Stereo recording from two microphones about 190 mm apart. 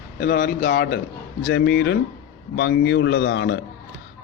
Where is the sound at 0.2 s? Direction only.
55° left (ahead or behind).